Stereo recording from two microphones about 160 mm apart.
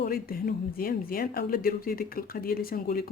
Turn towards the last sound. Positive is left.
turn(degrees=65)  # may be behind; listen again after turning